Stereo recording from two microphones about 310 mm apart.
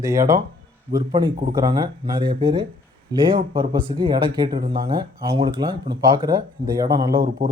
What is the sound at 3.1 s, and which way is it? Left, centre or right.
Speech, centre.